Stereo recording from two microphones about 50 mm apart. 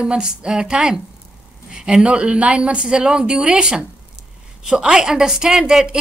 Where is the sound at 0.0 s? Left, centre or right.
Right.